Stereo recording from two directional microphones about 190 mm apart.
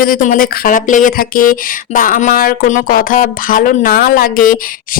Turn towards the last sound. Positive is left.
turn(degrees=45)  # may be behind; listen again after turning